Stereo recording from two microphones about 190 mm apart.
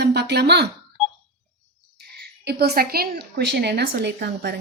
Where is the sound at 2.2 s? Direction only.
55° right (ahead or behind).